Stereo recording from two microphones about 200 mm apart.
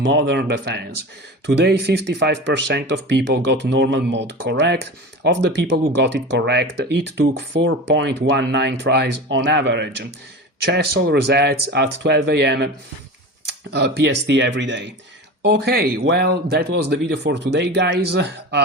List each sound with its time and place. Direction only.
0.0 s speech: 65° right (ahead or behind)